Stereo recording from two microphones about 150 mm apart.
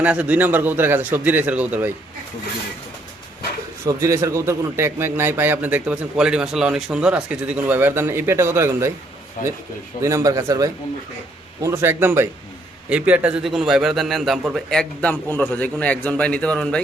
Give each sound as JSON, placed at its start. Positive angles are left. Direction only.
{"t": 0.0, "sound": "a man's voice", "side_deg": -10}
{"t": 3.8, "sound": "a man's voice", "side_deg": -20}
{"t": 10.0, "sound": "a man's voice", "side_deg": -20}